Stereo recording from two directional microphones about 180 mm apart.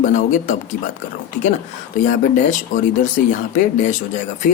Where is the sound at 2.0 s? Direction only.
45° left (ahead or behind).